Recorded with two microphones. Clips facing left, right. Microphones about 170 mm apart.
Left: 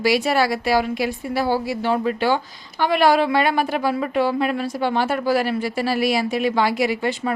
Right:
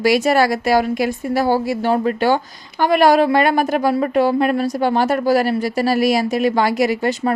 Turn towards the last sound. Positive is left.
turn(degrees=-40)  # may be behind; listen again after turning